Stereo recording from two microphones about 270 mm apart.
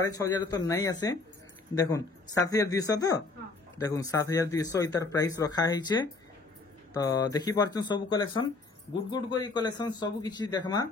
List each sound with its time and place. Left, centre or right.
0.0 s speech: centre